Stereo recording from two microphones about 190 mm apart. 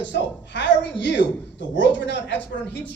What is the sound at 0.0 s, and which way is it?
A woman's voice, 70° left (ahead or behind).